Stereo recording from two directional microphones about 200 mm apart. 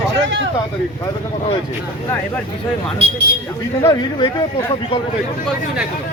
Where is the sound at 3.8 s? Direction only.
20° left (ahead or behind).